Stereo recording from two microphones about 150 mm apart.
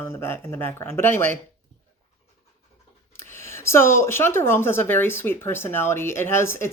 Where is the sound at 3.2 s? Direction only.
15° left (ahead or behind).